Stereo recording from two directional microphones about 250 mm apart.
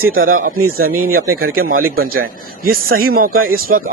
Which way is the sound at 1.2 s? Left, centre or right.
Right.